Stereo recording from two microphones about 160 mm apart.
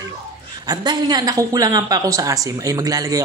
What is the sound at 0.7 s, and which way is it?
Speech, 25° right (ahead or behind).